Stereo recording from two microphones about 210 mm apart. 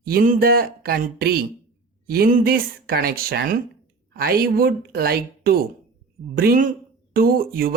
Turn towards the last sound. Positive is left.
turn(degrees=-45)  # may be behind; listen again after turning